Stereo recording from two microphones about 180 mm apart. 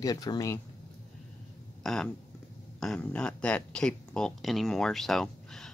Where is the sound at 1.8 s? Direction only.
Centre (ahead or behind).